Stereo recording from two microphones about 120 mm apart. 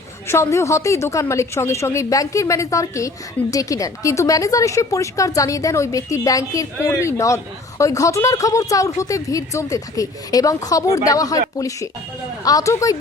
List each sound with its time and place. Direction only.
0.3 s a woman's voice: 25° left (ahead or behind)